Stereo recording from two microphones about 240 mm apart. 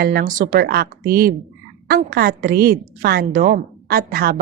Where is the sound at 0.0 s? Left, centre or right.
Right.